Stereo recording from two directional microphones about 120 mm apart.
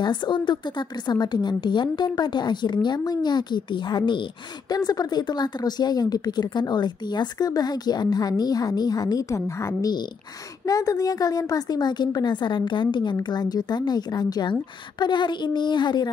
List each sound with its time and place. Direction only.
0.0 s a woman's voice: 40° left (ahead or behind)